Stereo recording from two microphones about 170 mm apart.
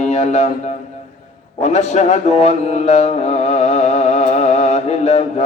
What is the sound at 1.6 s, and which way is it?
Mantra, 45° left (ahead or behind).